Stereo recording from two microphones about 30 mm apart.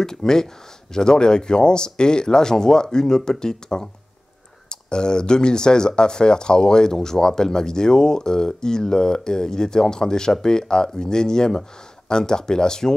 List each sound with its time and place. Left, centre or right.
0.0 s speech: centre